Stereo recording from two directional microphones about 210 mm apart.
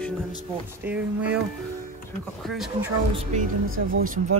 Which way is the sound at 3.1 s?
35° right (ahead or behind).